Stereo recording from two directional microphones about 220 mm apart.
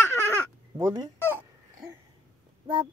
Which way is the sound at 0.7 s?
15° right (ahead or behind).